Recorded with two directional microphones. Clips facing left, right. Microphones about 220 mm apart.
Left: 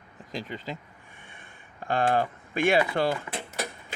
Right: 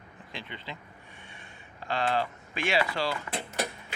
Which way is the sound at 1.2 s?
50° left (ahead or behind).